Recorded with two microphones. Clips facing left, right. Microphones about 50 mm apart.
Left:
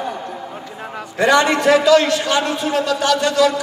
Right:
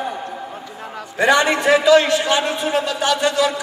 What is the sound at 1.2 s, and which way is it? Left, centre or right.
A man's voice, right.